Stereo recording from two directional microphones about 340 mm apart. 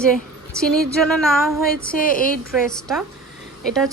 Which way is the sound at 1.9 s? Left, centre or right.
Left.